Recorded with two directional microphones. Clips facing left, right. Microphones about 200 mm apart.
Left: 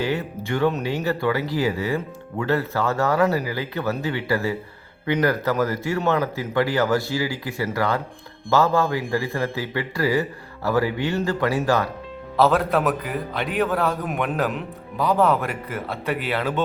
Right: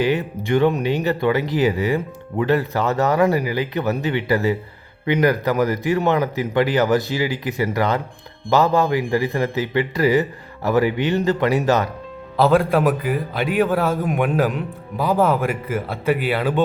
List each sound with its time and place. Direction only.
0.0 s speech: 15° right (ahead or behind)
12.4 s a man's voice: centre (ahead or behind)